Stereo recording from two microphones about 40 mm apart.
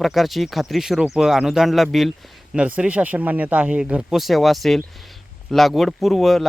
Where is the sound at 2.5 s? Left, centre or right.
Right.